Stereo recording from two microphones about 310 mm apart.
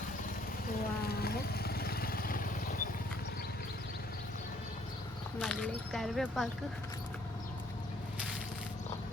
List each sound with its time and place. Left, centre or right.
1.0 s vehicle: left
5.4 s speech: centre